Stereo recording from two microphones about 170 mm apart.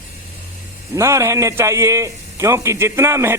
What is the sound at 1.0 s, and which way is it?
A man's voice, 15° right (ahead or behind).